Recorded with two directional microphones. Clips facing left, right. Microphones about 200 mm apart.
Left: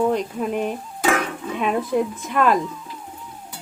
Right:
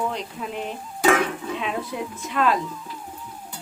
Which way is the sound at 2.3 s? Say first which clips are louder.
Left 3 dB; 50° left (ahead or behind).